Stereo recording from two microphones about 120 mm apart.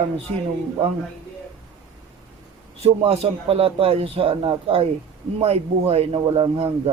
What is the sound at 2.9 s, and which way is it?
A man's voice, 55° right (ahead or behind).